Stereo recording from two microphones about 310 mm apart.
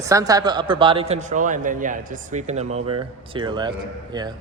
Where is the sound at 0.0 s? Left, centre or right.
Centre.